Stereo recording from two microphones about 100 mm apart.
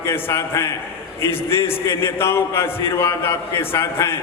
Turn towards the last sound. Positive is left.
turn(degrees=25)  # may be behind; listen again after turning